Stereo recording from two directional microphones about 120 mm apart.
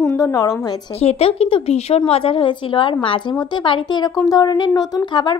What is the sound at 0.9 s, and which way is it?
A woman's voice, 60° left (ahead or behind).